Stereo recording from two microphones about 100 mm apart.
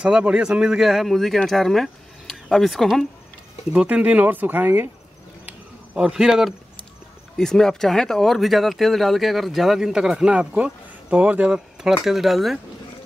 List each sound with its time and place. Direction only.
0.0 s speech: 10° right (ahead or behind)
3.7 s speech: 15° right (ahead or behind)
5.5 s a sound: 10° right (ahead or behind)
7.3 s speech: 5° left (ahead or behind)